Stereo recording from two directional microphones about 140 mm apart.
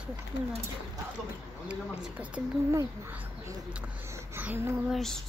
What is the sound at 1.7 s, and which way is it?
Speech, 10° right (ahead or behind).